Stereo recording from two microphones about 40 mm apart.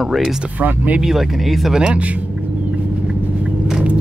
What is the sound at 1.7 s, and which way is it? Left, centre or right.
Speech, right.